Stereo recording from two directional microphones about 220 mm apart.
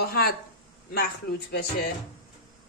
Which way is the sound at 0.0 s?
45° left (ahead or behind).